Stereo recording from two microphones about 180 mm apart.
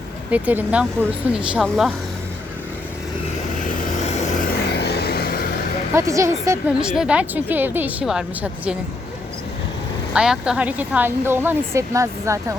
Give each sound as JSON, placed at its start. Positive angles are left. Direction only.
{"t": 0.3, "sound": "a woman's voice", "side_deg": -10}
{"t": 3.7, "sound": "vehicle", "side_deg": 45}
{"t": 4.7, "sound": "vehicle", "side_deg": 65}
{"t": 5.9, "sound": "a woman's voice", "side_deg": -15}
{"t": 6.8, "sound": "a woman's voice", "side_deg": -5}
{"t": 10.2, "sound": "a woman's voice", "side_deg": -5}